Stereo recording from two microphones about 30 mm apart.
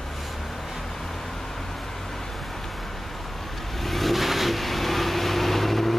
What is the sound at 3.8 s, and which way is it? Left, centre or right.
Vehicle, centre.